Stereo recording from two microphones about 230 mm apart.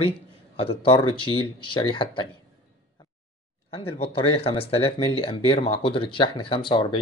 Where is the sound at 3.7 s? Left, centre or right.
Left.